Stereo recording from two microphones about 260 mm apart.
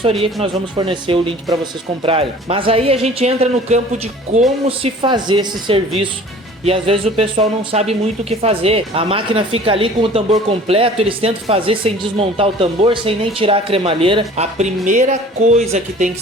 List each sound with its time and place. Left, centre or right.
0.0 s a woman's voice: right